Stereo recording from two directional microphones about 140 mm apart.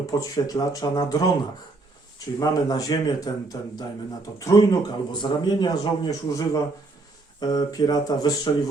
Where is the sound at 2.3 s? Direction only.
25° left (ahead or behind).